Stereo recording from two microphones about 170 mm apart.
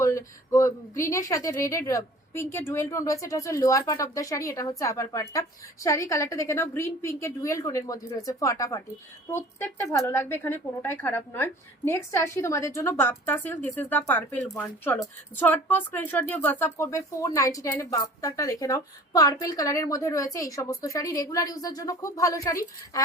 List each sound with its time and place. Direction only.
0.0 s a woman's voice: 15° left (ahead or behind)